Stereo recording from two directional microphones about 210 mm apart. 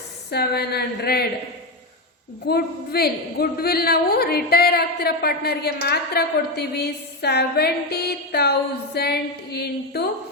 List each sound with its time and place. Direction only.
0.3 s a man's voice: 50° left (ahead or behind)
2.5 s a man's voice: 50° left (ahead or behind)